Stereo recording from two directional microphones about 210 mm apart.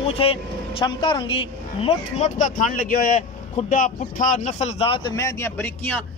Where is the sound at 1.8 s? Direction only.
35° left (ahead or behind).